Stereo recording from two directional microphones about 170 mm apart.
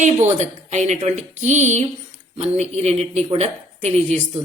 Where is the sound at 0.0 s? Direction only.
45° right (ahead or behind).